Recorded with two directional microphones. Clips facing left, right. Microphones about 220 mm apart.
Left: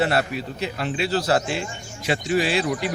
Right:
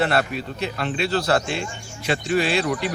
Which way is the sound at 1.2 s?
60° right (ahead or behind).